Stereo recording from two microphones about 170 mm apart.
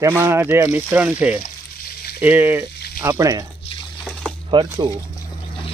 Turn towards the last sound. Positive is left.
turn(degrees=-30)  # may be behind; listen again after turning